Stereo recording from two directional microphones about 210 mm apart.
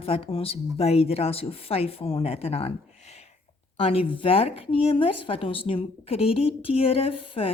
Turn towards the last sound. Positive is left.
turn(degrees=25)  # may be behind; listen again after turning